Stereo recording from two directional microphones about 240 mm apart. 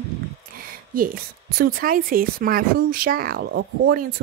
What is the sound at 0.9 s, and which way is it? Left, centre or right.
A woman's voice, right.